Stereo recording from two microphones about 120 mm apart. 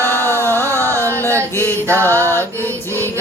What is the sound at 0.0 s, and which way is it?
Carnatic music, 20° left (ahead or behind).